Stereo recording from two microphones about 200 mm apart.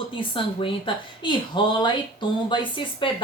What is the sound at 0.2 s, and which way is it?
Speech, 25° left (ahead or behind).